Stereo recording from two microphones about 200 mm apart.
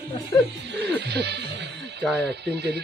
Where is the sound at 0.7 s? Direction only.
55° right (ahead or behind).